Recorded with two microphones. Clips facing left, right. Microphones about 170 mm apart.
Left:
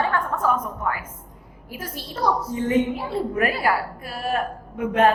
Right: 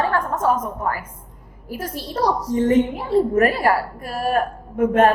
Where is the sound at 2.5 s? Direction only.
45° right (ahead or behind).